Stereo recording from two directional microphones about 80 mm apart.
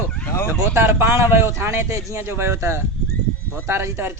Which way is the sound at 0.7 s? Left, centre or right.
Right.